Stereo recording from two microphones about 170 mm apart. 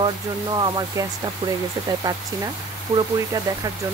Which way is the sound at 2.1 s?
20° right (ahead or behind).